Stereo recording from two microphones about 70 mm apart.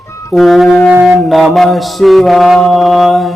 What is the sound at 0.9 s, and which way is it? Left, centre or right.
Mantra, centre.